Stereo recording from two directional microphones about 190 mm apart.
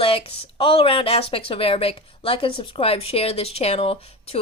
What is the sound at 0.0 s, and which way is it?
Speech, 30° left (ahead or behind).